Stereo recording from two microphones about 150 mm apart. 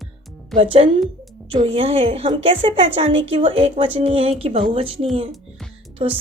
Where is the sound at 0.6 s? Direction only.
40° right (ahead or behind).